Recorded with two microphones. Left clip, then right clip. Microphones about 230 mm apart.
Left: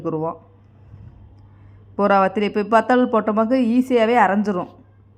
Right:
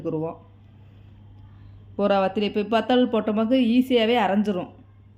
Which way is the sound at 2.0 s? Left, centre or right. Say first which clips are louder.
Left 5 dB; centre.